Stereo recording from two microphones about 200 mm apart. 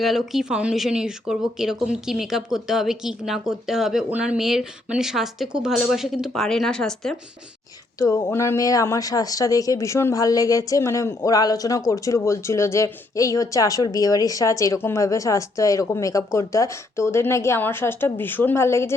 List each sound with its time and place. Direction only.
0.0 s speech: centre (ahead or behind)
7.9 s a woman's voice: 15° left (ahead or behind)